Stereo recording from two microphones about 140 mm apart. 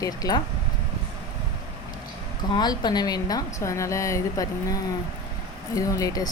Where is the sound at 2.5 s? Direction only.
30° left (ahead or behind).